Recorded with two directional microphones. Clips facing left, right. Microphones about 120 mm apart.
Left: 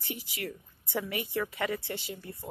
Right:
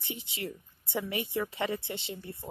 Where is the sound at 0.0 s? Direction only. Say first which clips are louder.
Even; 25° right (ahead or behind).